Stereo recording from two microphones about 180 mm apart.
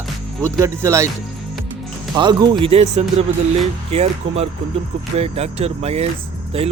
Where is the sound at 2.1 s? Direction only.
25° right (ahead or behind).